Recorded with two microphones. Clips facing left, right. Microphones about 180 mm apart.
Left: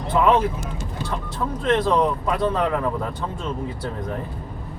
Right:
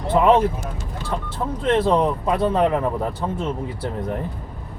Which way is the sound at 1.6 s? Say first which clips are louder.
Right 1 dB; 30° right (ahead or behind).